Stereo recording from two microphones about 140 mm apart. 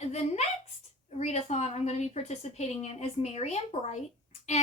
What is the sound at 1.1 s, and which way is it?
A woman's voice, 50° left (ahead or behind).